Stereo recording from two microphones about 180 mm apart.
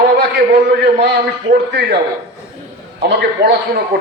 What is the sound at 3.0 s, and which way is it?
Speech, 65° right (ahead or behind).